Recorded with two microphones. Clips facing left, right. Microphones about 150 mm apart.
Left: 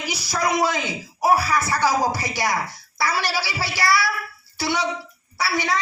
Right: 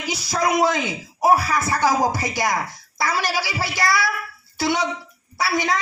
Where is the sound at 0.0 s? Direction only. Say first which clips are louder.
Right 2 dB; 20° right (ahead or behind).